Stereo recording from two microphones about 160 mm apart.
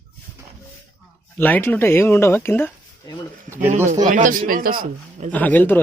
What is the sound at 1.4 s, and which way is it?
Speech, 10° left (ahead or behind).